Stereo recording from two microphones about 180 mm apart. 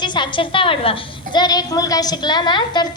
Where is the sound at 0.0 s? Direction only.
25° left (ahead or behind).